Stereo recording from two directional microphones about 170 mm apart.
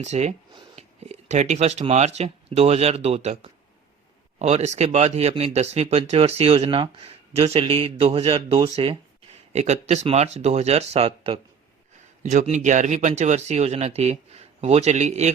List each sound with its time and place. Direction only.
0.0 s speech: 40° right (ahead or behind)
0.5 s a sound: 40° right (ahead or behind)
1.9 s speech: 40° right (ahead or behind)
12.2 s speech: 45° right (ahead or behind)